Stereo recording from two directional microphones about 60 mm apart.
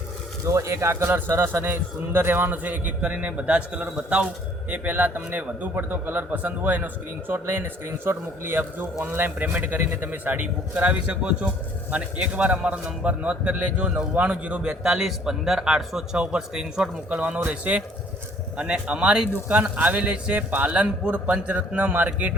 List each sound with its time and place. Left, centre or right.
0.4 s a man's voice: right
11.0 s a man's voice: centre
14.8 s speech: centre
17.1 s a man's voice: right